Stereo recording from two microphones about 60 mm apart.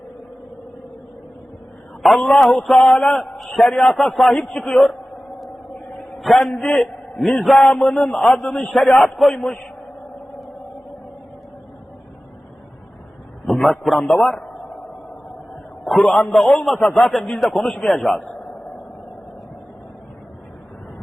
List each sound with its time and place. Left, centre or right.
2.0 s a man's voice: centre
3.2 s a man's voice: centre
4.4 s a man's voice: centre
6.1 s a man's voice: centre
8.1 s a man's voice: centre
8.9 s a man's voice: left
13.4 s a man's voice: centre
15.8 s a man's voice: centre